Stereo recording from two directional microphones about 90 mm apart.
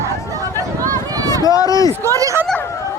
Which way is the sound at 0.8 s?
45° right (ahead or behind).